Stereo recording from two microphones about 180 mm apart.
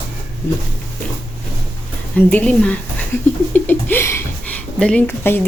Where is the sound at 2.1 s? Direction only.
10° left (ahead or behind).